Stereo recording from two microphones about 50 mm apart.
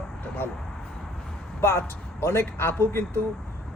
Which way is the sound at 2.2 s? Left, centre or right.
Left.